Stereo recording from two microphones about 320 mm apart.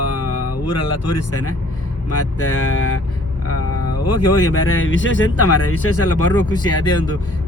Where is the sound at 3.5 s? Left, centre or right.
Left.